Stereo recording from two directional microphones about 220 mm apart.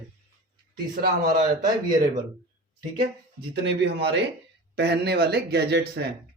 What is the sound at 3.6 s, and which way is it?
Speech, 50° right (ahead or behind).